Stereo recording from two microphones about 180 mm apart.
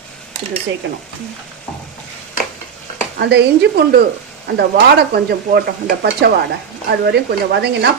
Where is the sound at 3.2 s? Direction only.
70° right (ahead or behind).